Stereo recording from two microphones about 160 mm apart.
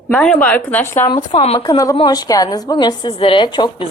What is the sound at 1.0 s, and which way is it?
Speech, 30° left (ahead or behind).